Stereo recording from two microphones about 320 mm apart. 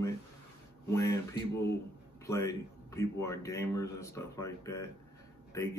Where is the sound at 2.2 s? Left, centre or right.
Centre.